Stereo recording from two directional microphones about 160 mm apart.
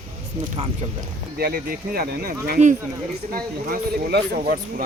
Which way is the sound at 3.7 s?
70° right (ahead or behind).